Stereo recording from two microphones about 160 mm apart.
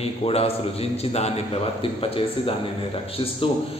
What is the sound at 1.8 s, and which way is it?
Speech, 35° left (ahead or behind).